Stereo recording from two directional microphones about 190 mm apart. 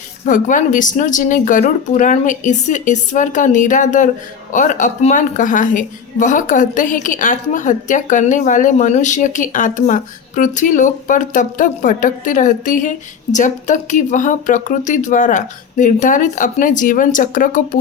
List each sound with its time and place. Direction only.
0.3 s a woman's voice: 40° left (ahead or behind)